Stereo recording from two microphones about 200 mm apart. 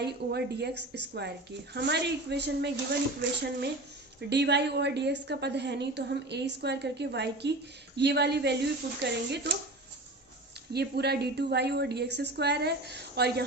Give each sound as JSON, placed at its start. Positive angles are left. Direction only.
{"t": 0.0, "sound": "a woman's voice", "side_deg": -55}
{"t": 10.7, "sound": "a woman's voice", "side_deg": -55}